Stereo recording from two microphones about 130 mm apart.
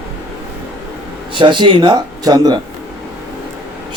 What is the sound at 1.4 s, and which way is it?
Speech, 35° right (ahead or behind).